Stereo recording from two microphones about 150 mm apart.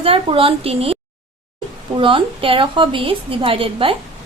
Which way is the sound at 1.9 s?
35° right (ahead or behind).